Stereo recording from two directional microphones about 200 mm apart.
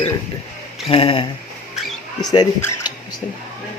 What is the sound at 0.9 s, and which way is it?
Speech, 25° left (ahead or behind).